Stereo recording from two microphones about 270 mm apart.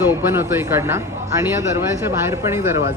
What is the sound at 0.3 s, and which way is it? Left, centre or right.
Speech, centre.